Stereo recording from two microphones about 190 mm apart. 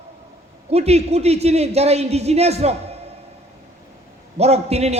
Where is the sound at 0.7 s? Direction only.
35° right (ahead or behind).